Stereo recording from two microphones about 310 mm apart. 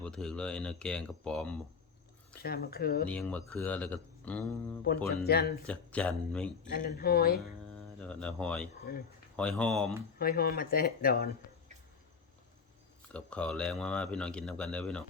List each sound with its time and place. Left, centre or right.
0.0 s speech: centre
2.3 s speech: left
3.1 s speech: centre
5.0 s speech: left
5.6 s speech: centre
6.8 s speech: left
7.9 s speech: centre
10.2 s speech: left
13.1 s speech: centre